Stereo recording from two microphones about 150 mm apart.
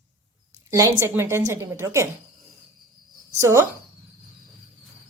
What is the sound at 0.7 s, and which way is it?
A woman's voice, 20° right (ahead or behind).